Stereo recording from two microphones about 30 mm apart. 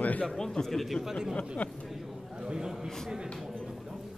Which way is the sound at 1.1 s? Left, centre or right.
Centre.